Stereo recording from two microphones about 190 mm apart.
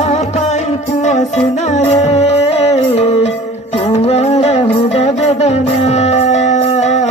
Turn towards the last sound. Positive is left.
turn(degrees=35)  # may be behind; listen again after turning